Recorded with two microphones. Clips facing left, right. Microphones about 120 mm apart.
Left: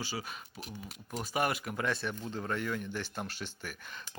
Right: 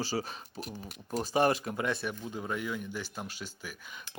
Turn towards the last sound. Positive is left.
turn(degrees=-10)  # may be behind; listen again after turning